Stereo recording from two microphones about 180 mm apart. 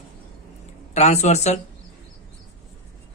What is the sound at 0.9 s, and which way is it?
Speech, 40° left (ahead or behind).